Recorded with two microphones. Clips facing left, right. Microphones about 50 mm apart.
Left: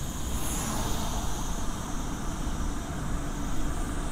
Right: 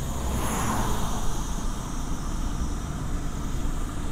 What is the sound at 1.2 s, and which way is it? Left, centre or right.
Vehicle, left.